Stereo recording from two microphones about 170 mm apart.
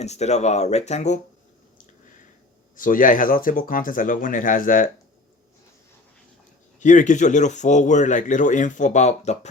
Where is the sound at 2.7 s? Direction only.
50° left (ahead or behind).